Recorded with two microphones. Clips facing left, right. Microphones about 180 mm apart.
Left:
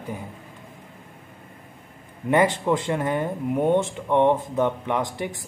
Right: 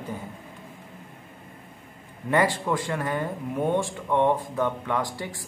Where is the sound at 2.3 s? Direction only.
20° left (ahead or behind).